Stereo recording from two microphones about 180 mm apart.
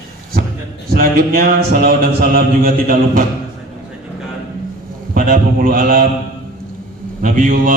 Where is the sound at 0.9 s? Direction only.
55° right (ahead or behind).